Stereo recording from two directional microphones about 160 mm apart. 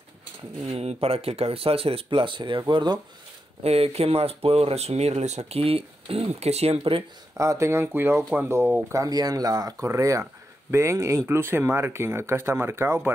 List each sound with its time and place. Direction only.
0.7 s speech: 40° right (ahead or behind)
3.6 s speech: 40° right (ahead or behind)
7.3 s speech: 20° right (ahead or behind)